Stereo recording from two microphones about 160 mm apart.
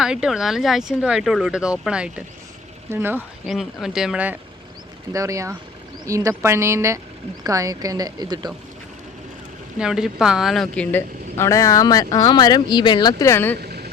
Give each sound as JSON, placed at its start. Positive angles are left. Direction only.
{"t": 0.0, "sound": "speech", "side_deg": -5}
{"t": 3.4, "sound": "speech", "side_deg": 0}
{"t": 5.1, "sound": "speech", "side_deg": -20}
{"t": 9.7, "sound": "speech", "side_deg": -5}
{"t": 10.9, "sound": "speech", "side_deg": 15}
{"t": 13.6, "sound": "a sound", "side_deg": -90}